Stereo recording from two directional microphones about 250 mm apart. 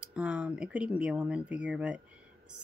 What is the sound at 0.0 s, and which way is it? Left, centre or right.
Speech, centre.